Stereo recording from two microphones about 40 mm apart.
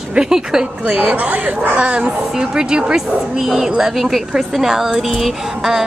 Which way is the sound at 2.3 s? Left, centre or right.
Centre.